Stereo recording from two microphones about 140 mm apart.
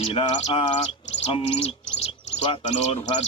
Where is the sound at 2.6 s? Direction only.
55° left (ahead or behind).